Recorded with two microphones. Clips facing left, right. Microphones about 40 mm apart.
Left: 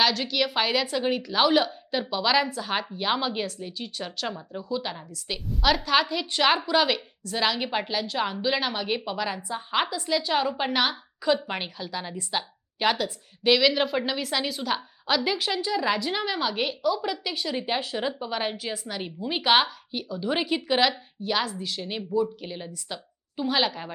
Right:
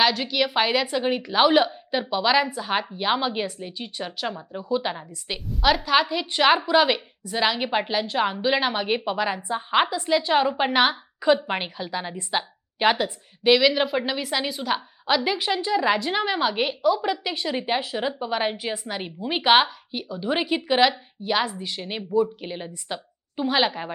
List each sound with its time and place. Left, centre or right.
0.0 s a woman's voice: centre
5.5 s a woman's voice: centre; by 13.1 s right
13.4 s a woman's voice: centre